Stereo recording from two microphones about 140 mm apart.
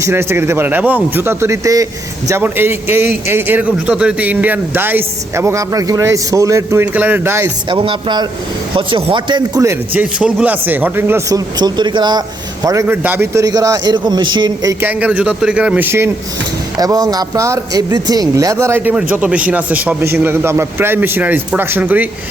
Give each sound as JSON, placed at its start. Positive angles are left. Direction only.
{"t": 0.0, "sound": "speech", "side_deg": -20}
{"t": 7.7, "sound": "speech", "side_deg": -35}
{"t": 9.6, "sound": "a man's voice", "side_deg": -20}
{"t": 10.0, "sound": "speech", "side_deg": -5}
{"t": 12.6, "sound": "speech", "side_deg": -20}
{"t": 13.4, "sound": "a man's voice", "side_deg": -25}
{"t": 14.8, "sound": "speech", "side_deg": -10}
{"t": 16.7, "sound": "speech", "side_deg": -25}